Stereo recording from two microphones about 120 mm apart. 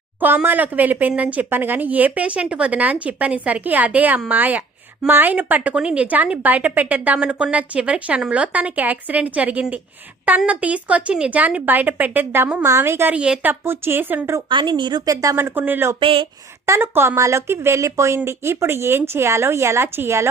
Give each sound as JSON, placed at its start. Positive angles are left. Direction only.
{"t": 0.2, "sound": "a woman's voice", "side_deg": -15}
{"t": 13.1, "sound": "a woman's voice", "side_deg": -10}
{"t": 14.5, "sound": "a woman's voice", "side_deg": -40}
{"t": 16.0, "sound": "speech", "side_deg": -50}
{"t": 16.6, "sound": "a woman's voice", "side_deg": -20}